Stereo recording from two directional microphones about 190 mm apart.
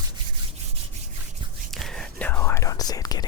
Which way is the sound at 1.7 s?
Centre (ahead or behind).